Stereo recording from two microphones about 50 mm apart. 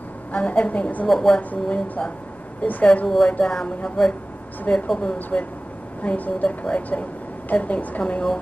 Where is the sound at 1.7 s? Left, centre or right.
Left.